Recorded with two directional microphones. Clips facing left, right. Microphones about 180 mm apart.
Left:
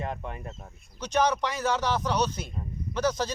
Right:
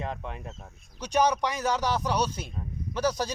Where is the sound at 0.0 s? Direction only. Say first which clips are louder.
Left 1 dB; 5° left (ahead or behind).